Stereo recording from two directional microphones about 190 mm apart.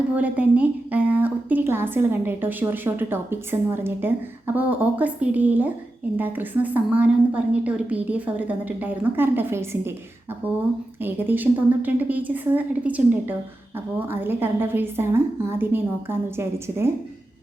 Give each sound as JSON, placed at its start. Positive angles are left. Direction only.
{"t": 0.2, "sound": "a woman's voice", "side_deg": -10}